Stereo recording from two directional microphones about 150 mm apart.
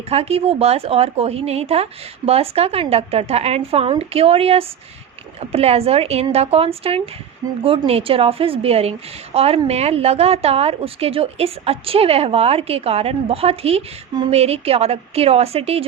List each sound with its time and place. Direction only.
0.1 s a woman's voice: 40° right (ahead or behind)